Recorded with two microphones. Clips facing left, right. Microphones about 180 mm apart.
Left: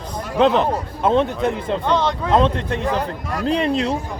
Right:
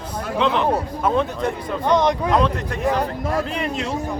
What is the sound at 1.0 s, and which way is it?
Speech, 25° left (ahead or behind).